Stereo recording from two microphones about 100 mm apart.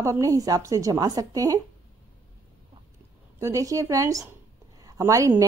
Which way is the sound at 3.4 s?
30° right (ahead or behind).